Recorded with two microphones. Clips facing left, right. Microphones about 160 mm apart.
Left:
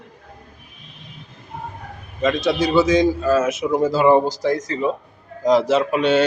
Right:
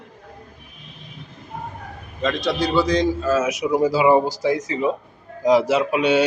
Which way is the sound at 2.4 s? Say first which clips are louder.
Left 3 dB; centre (ahead or behind).